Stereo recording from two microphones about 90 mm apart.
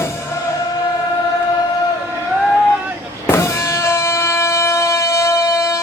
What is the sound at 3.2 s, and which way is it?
Music, 30° left (ahead or behind).